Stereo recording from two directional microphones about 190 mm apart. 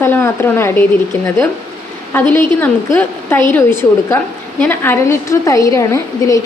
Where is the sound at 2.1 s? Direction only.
10° left (ahead or behind).